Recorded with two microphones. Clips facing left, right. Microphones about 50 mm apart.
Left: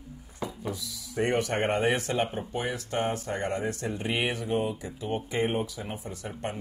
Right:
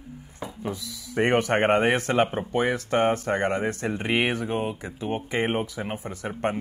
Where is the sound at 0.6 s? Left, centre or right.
Right.